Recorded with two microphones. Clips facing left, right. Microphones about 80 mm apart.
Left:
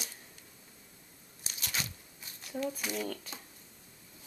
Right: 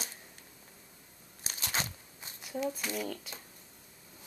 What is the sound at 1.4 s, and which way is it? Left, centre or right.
Crunch, right.